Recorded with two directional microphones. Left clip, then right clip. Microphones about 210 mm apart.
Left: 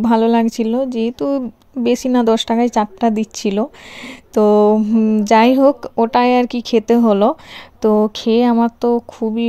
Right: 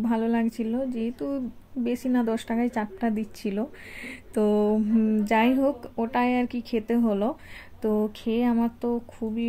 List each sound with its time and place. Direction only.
0.0 s speech: 35° left (ahead or behind)
4.7 s mantra: 25° left (ahead or behind)
5.2 s speech: 40° left (ahead or behind)